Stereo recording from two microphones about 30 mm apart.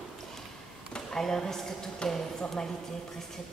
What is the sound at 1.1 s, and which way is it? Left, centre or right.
Speech, centre.